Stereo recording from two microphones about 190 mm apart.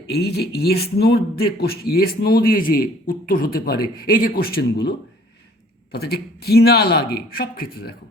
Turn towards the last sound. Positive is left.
turn(degrees=55)  # may be behind; listen again after turning